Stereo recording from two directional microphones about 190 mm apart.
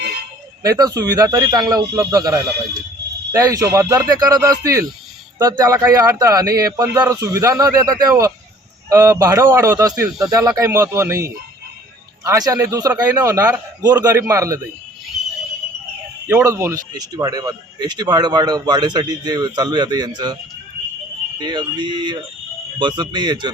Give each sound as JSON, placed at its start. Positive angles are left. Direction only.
{"t": 0.6, "sound": "speech", "side_deg": -20}
{"t": 16.2, "sound": "speech", "side_deg": -15}